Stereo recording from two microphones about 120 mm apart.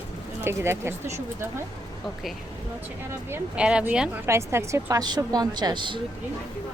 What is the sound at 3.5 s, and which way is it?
A woman's voice, 10° right (ahead or behind).